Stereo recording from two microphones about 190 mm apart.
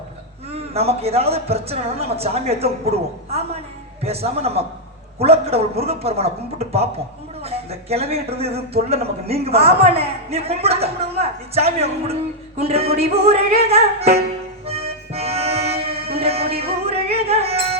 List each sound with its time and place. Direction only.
0.5 s speech: 30° right (ahead or behind)
14.7 s music: 35° right (ahead or behind)